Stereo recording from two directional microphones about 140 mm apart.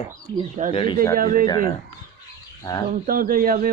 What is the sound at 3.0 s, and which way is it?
Speech, 90° right.